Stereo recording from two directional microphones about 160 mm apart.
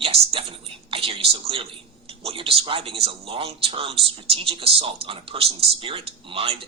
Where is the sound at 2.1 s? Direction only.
35° right (ahead or behind).